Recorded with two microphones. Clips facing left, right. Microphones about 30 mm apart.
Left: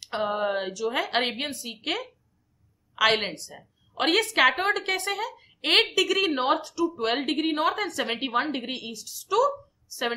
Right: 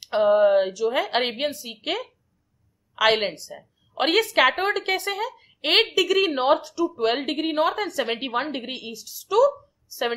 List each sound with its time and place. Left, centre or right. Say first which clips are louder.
0.0 s a woman's voice: right 9 dB; centre
5.4 s a sound: right 1 dB; centre
5.9 s a woman's voice: right 3 dB; centre